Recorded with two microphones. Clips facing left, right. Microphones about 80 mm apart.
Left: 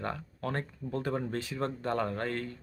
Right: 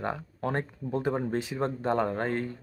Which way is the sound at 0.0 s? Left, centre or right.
Right.